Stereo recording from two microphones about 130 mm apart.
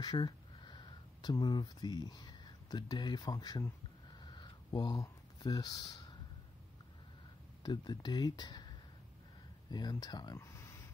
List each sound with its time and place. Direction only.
0.0 s speech: 35° left (ahead or behind)
4.2 s a sound: 35° left (ahead or behind)
7.6 s speech: 35° left (ahead or behind)
9.7 s speech: 30° left (ahead or behind)